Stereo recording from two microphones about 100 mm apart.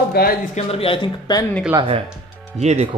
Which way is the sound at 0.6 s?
80° left.